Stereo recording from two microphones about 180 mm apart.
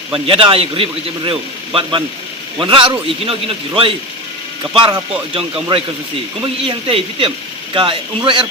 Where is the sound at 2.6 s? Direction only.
25° right (ahead or behind).